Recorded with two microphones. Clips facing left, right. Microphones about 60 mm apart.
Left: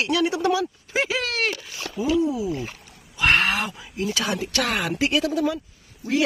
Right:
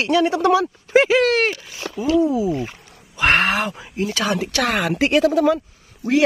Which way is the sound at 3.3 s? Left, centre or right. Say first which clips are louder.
Right 3 dB; right.